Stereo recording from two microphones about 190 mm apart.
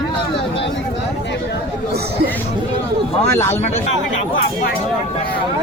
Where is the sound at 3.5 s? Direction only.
35° left (ahead or behind).